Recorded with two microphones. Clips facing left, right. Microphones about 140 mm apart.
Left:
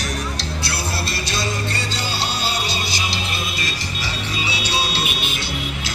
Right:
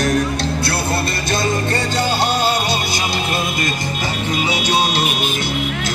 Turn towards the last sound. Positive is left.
turn(degrees=-50)  # may be behind; listen again after turning